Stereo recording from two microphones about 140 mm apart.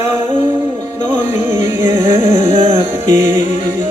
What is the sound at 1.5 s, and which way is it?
Music, 15° right (ahead or behind).